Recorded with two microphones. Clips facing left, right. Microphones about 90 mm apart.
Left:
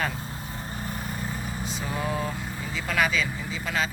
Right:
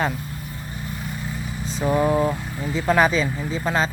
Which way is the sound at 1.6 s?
35° right (ahead or behind).